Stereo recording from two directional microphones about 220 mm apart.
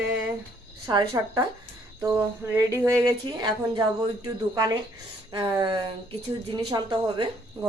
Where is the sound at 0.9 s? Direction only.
15° right (ahead or behind).